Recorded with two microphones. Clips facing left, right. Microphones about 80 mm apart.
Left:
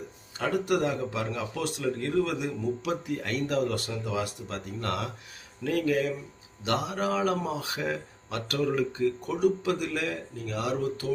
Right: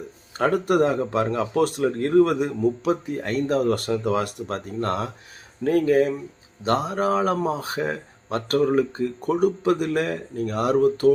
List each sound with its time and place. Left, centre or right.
0.3 s speech: right
4.8 s speech: right